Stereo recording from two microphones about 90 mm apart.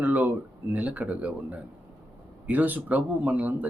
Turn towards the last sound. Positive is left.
turn(degrees=-15)  # may be behind; listen again after turning